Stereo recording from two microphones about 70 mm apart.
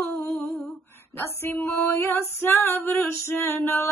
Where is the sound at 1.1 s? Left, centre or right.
Left.